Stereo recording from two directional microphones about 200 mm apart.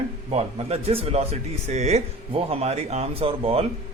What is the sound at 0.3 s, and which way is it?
Speech, 30° right (ahead or behind).